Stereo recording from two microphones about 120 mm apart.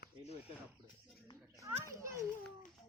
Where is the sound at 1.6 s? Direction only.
25° right (ahead or behind).